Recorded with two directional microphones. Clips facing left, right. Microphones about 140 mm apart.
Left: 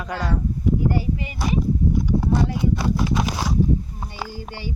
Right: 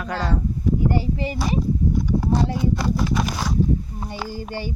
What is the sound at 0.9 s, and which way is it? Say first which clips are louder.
Speech: right 2 dB; 30° right (ahead or behind).